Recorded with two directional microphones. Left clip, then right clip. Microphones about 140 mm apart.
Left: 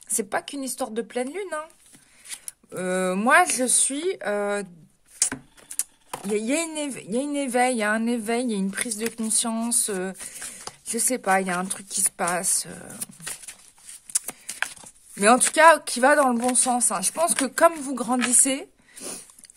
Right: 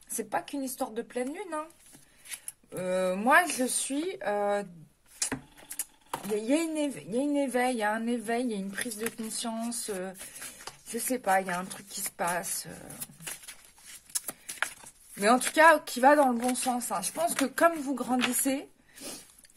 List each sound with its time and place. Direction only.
0.1 s speech: 75° left (ahead or behind)
2.2 s speech: 55° left (ahead or behind)
5.2 s speech: 70° left (ahead or behind); by 13.0 s 50° left (ahead or behind)
13.8 s a sound: 45° left (ahead or behind)
15.1 s speech: 50° left (ahead or behind)